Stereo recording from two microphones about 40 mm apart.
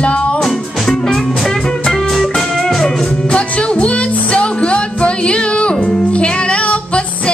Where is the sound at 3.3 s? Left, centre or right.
Left.